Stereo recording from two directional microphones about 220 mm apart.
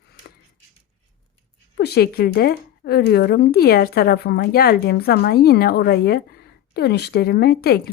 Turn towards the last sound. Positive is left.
turn(degrees=45)  # may be behind; listen again after turning